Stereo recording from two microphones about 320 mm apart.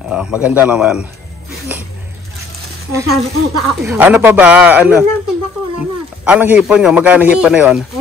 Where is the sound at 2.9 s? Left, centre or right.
Centre.